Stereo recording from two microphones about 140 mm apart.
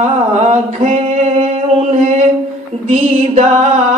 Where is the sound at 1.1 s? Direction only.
55° right (ahead or behind).